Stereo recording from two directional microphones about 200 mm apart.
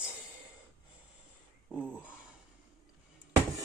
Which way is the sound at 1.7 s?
5° left (ahead or behind).